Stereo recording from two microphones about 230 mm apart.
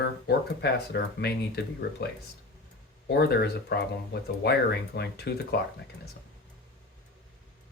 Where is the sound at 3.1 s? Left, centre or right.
Left.